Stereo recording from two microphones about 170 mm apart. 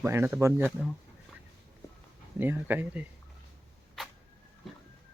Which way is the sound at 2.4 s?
10° right (ahead or behind).